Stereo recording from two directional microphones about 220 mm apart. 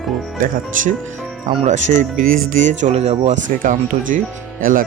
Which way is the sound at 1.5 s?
30° right (ahead or behind).